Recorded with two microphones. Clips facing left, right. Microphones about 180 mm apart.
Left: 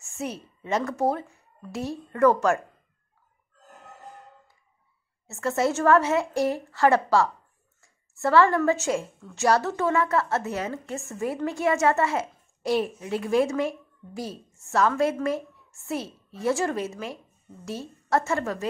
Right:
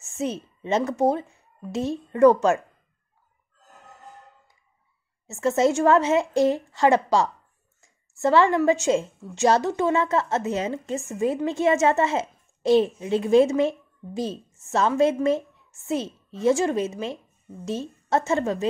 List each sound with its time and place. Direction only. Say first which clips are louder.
0.0 s a woman's voice: right 5 dB; 20° right (ahead or behind)
5.3 s a woman's voice: right 4 dB; 20° right (ahead or behind)